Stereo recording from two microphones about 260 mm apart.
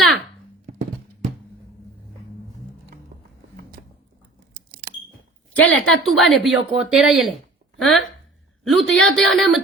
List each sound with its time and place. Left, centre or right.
4.5 s smoke detector: right
5.5 s speech: centre